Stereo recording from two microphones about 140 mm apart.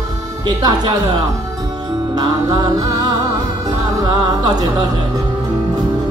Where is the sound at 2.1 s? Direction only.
30° right (ahead or behind).